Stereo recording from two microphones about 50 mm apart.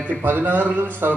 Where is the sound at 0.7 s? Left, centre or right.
Right.